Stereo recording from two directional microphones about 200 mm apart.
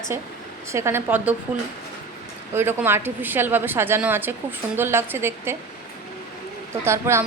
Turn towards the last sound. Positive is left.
turn(degrees=-15)  # may be behind; listen again after turning